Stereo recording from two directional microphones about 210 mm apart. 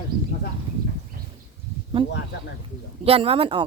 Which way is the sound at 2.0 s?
25° right (ahead or behind).